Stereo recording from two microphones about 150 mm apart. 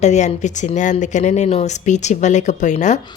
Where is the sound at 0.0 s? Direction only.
50° left (ahead or behind).